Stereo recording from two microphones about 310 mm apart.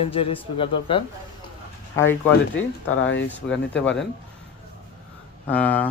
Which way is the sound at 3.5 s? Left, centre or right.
Centre.